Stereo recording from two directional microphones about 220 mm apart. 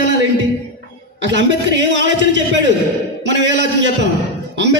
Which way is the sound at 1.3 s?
55° right (ahead or behind).